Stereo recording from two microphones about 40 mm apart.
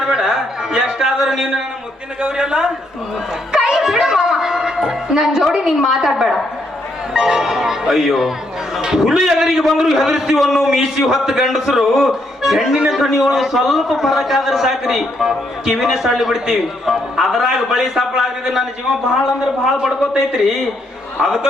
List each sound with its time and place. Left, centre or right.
0.0 s a man's voice: centre
19.8 s a man's voice: centre